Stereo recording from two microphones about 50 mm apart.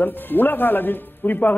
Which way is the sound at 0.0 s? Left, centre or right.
Left.